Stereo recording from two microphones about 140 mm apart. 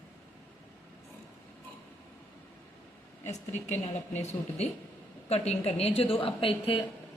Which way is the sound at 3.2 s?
55° left (ahead or behind).